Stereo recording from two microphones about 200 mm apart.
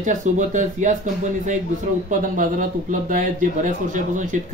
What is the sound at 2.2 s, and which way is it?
Speech, 40° right (ahead or behind).